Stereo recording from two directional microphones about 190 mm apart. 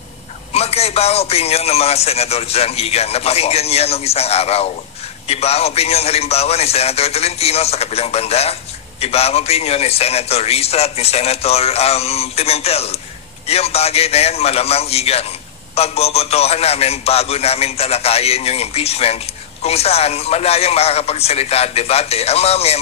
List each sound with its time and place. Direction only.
0.5 s a man's voice: 35° left (ahead or behind)